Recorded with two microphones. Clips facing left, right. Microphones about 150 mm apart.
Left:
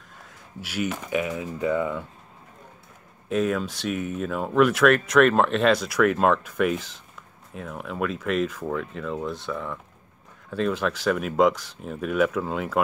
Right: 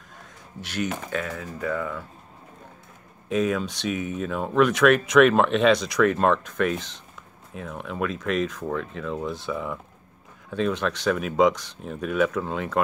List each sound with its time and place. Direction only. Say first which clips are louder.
0.6 s speech: even; 10° left (ahead or behind)
3.3 s speech: even; centre (ahead or behind)